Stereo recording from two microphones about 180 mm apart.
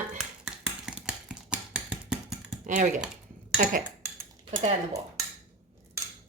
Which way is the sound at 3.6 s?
45° right (ahead or behind).